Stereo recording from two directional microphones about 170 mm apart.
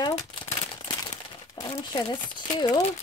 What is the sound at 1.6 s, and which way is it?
Speech, 25° left (ahead or behind).